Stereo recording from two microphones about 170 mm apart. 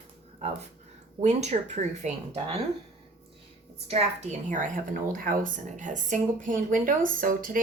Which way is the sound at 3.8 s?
40° right (ahead or behind).